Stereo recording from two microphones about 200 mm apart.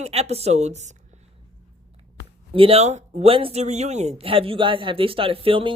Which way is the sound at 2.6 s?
30° right (ahead or behind).